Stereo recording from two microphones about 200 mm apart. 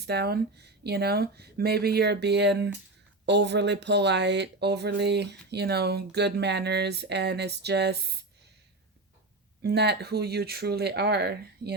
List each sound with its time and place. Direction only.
0.0 s speech: 55° right (ahead or behind)
9.6 s speech: 55° right (ahead or behind)